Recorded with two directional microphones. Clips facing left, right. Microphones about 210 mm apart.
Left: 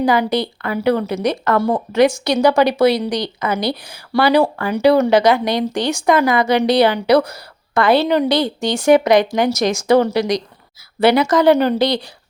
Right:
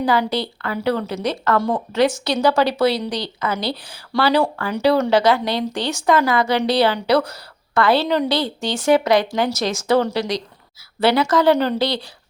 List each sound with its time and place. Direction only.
0.0 s a woman's voice: 15° left (ahead or behind)